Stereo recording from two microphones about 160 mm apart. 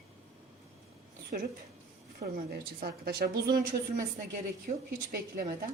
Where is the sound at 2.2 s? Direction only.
80° right; by 5.5 s 60° right (ahead or behind).